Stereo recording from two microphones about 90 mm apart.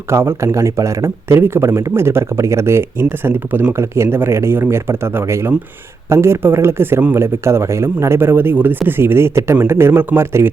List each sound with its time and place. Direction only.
0.1 s speech: 30° right (ahead or behind)